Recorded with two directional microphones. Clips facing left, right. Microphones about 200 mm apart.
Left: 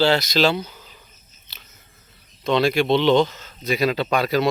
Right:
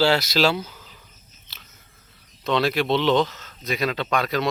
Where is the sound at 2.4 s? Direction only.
Centre (ahead or behind).